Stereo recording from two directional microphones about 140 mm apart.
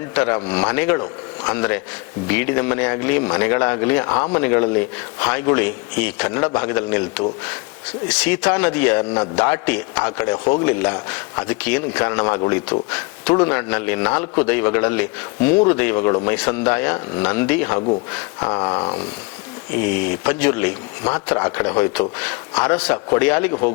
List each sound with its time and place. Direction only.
0.1 s speech: 15° left (ahead or behind)
8.2 s speech: 10° left (ahead or behind)
19.8 s speech: 10° left (ahead or behind)